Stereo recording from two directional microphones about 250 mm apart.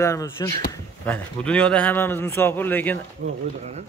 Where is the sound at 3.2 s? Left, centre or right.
Right.